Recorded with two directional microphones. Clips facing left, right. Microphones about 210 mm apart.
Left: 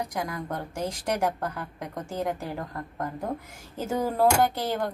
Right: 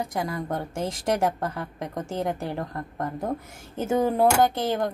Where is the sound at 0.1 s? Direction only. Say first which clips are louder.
Right 3 dB; 25° right (ahead or behind).